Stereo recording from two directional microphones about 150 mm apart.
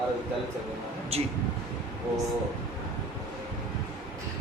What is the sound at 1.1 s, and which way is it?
Speech, 45° right (ahead or behind).